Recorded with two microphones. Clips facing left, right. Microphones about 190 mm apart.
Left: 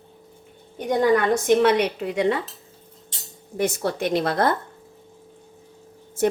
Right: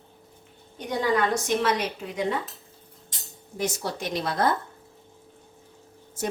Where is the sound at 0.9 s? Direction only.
55° left (ahead or behind); by 2.4 s 70° left (ahead or behind).